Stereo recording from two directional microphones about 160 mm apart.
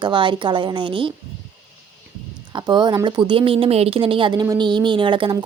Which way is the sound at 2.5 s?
30° right (ahead or behind).